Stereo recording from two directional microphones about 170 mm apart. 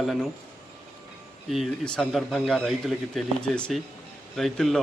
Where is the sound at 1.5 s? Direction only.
Centre (ahead or behind).